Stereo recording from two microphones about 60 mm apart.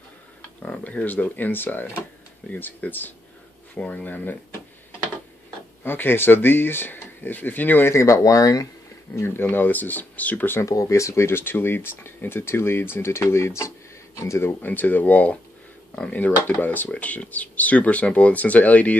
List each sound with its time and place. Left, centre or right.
0.6 s speech: left
5.9 s speech: left
7.9 s speech: left
9.1 s speech: left
10.6 s speech: left
14.4 s speech: left